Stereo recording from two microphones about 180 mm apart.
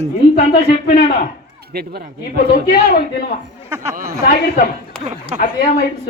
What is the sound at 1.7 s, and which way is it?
Speech, 60° right (ahead or behind).